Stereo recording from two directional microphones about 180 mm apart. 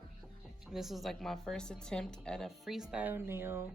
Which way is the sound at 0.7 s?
Centre (ahead or behind).